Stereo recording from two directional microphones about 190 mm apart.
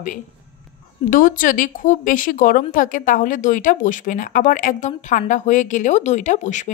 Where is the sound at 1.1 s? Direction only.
45° left (ahead or behind).